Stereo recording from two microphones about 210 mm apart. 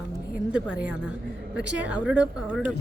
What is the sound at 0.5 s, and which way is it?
Speech, 5° right (ahead or behind).